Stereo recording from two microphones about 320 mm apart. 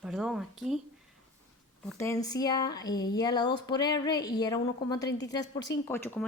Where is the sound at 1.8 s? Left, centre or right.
Centre.